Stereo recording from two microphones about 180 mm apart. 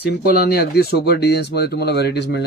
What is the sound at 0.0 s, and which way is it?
Speech, 60° left (ahead or behind).